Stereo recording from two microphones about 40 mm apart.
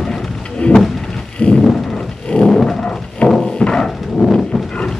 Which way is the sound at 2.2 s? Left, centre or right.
Left.